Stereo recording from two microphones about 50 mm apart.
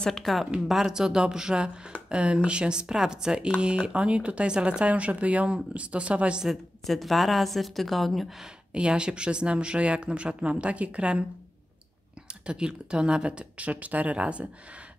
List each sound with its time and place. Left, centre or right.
0.2 s a woman's voice: centre; by 6.4 s right
6.4 s a woman's voice: centre
8.7 s speech: centre
12.4 s speech: centre